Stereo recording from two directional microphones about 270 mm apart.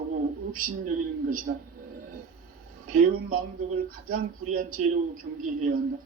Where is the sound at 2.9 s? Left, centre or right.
Right.